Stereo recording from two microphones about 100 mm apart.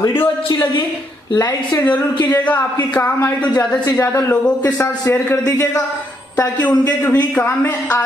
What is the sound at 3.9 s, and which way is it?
A man's voice, 35° left (ahead or behind).